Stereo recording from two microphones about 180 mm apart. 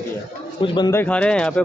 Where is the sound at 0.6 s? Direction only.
25° left (ahead or behind).